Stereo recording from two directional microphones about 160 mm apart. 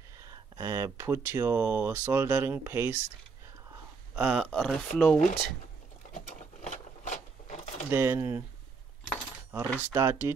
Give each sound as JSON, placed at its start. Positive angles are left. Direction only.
{"t": 0.6, "sound": "speech", "side_deg": -20}
{"t": 4.1, "sound": "speech", "side_deg": -5}
{"t": 6.1, "sound": "sewing machine", "side_deg": 45}
{"t": 7.9, "sound": "speech", "side_deg": -15}
{"t": 9.9, "sound": "speech", "side_deg": -15}